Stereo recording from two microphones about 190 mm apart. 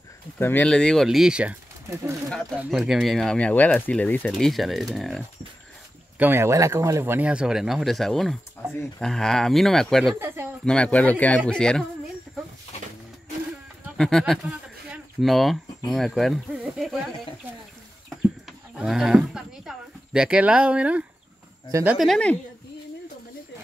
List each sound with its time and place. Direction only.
0.4 s speech: 10° left (ahead or behind)
6.1 s speech: 10° right (ahead or behind)
10.1 s a sound: 10° right (ahead or behind)
10.6 s speech: 5° left (ahead or behind)
13.9 s speech: 5° left (ahead or behind)
14.9 s a sound: centre (ahead or behind)
15.9 s speech: centre (ahead or behind)
18.8 s a sound: centre (ahead or behind)
21.9 s speech: centre (ahead or behind)